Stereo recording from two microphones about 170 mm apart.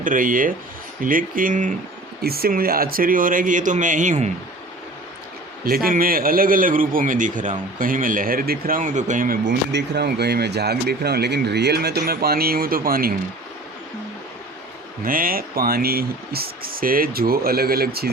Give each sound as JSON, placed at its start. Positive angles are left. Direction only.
{"t": 0.0, "sound": "speech", "side_deg": -50}
{"t": 2.2, "sound": "speech", "side_deg": -60}
{"t": 5.6, "sound": "a man's voice", "side_deg": -60}
{"t": 15.0, "sound": "a man's voice", "side_deg": -55}